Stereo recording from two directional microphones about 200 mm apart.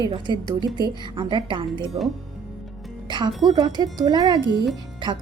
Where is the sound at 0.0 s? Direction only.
20° right (ahead or behind).